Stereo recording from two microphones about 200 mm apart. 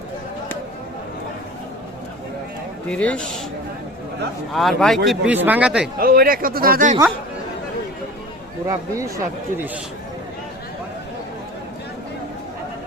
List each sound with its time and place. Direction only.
2.9 s speech: 5° left (ahead or behind)
4.5 s speech: centre (ahead or behind)
6.0 s speech: 45° right (ahead or behind)
8.6 s speech: 15° right (ahead or behind)